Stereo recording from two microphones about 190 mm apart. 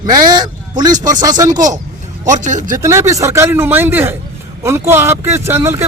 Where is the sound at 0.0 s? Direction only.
20° right (ahead or behind).